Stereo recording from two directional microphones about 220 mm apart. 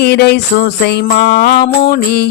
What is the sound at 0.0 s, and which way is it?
Music, 50° left (ahead or behind).